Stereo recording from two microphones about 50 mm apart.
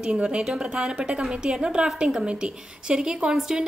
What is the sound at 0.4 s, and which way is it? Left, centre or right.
A woman's voice, centre.